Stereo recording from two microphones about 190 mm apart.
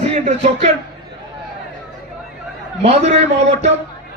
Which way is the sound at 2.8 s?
35° right (ahead or behind).